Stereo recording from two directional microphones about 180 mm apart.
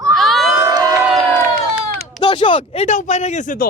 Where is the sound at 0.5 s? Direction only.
20° right (ahead or behind).